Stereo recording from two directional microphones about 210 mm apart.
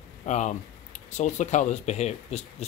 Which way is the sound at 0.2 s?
35° left (ahead or behind).